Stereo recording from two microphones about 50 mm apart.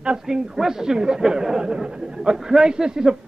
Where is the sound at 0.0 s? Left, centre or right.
Centre.